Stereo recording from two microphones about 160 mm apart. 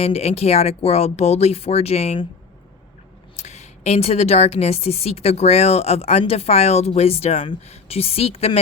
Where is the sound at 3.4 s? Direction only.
40° left (ahead or behind).